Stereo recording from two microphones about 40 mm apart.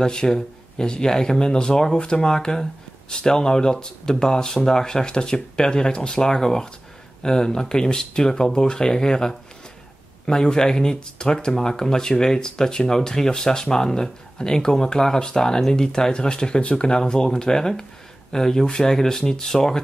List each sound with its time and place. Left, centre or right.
0.0 s speech: centre